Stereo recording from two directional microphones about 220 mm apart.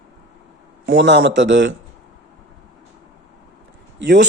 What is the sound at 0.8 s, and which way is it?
Speech, 55° right (ahead or behind).